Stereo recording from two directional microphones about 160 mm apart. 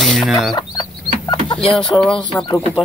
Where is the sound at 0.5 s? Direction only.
25° left (ahead or behind).